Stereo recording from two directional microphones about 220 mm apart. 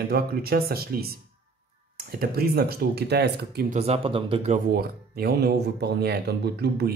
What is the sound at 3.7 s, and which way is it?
Speech, 30° right (ahead or behind).